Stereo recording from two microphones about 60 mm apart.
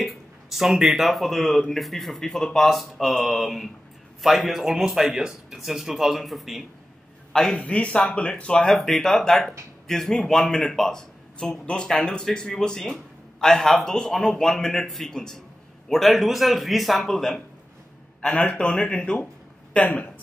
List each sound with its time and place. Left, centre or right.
0.0 s a man's voice: centre
7.6 s speech: centre
8.6 s a man's voice: centre
18.2 s a man's voice: centre